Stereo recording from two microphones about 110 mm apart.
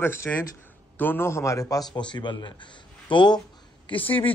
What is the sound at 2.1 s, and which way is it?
Speech, 45° left (ahead or behind).